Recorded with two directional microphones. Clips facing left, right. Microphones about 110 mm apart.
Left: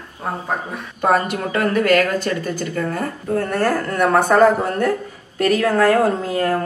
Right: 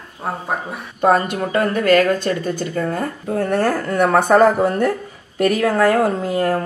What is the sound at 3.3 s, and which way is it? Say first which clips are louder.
Speech: right 1 dB; 20° right (ahead or behind).